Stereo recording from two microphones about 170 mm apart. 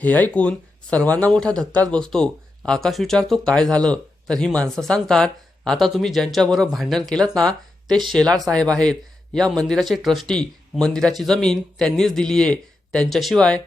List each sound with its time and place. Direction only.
0.0 s speech: 10° left (ahead or behind)
7.9 s speech: 25° right (ahead or behind)
8.1 s speech: 5° left (ahead or behind)